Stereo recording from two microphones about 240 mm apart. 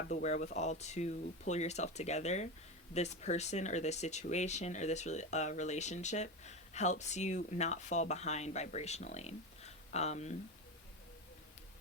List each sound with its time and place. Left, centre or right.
0.0 s speech: left